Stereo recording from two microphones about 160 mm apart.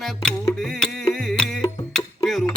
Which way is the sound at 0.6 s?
Centre (ahead or behind).